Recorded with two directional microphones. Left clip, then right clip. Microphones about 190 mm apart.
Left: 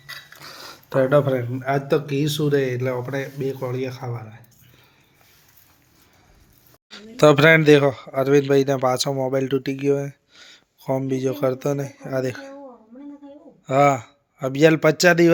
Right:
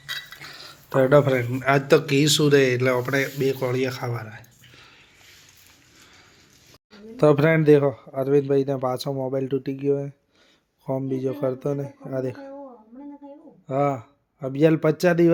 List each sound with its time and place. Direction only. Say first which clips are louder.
0.3 s dishes: even; 30° left (ahead or behind)
0.9 s speech: even; centre (ahead or behind)
6.9 s speech: left 4 dB; centre (ahead or behind)
13.7 s speech: left 7 dB; 10° left (ahead or behind)